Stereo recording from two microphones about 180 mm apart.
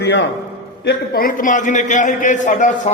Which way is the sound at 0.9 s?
55° left (ahead or behind).